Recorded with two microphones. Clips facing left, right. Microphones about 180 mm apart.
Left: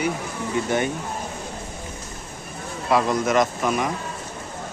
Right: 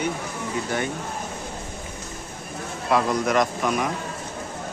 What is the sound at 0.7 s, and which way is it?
Speech, 20° left (ahead or behind).